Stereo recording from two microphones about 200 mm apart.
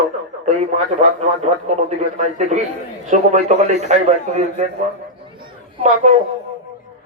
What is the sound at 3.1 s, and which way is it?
Speech, 35° right (ahead or behind).